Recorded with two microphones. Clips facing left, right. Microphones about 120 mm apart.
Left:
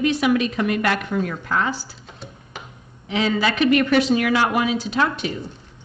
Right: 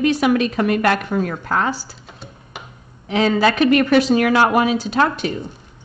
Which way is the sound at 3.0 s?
45° right (ahead or behind).